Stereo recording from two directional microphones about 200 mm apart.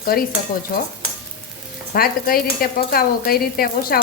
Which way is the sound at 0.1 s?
45° left (ahead or behind).